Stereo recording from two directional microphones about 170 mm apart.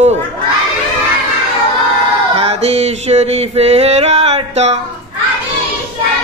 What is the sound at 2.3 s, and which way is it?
Music, 35° right (ahead or behind).